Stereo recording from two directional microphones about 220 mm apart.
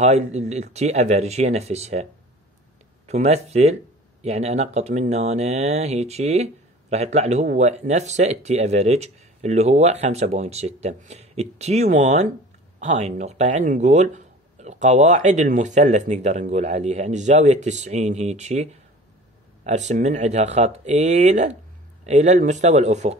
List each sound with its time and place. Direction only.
0.0 s speech: 30° right (ahead or behind)
3.1 s speech: 30° right (ahead or behind)